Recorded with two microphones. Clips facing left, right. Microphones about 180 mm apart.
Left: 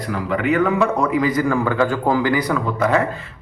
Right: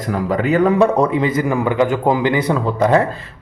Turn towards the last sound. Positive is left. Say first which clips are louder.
# right 4 dB
turn(degrees=-35)  # may be behind; listen again after turning